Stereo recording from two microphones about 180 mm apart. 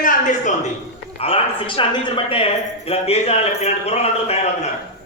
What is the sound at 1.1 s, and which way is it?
Speech, 35° left (ahead or behind).